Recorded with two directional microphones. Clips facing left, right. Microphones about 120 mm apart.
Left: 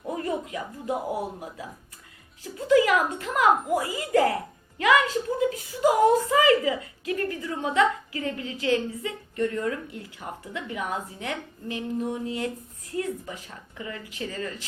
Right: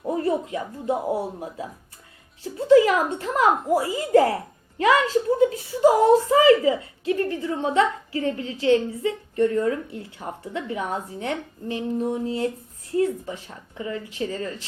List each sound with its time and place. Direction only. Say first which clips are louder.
0.0 s a woman's voice: right 6 dB; 30° right (ahead or behind)